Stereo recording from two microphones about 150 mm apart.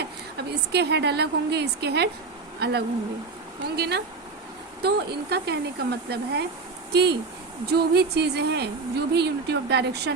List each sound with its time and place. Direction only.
0.0 s a woman's voice: 90° right